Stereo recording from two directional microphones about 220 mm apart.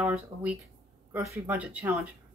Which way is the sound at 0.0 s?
5° right (ahead or behind).